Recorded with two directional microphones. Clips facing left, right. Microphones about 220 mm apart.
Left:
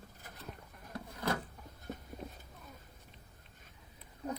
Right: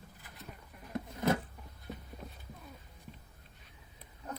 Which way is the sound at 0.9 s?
25° right (ahead or behind).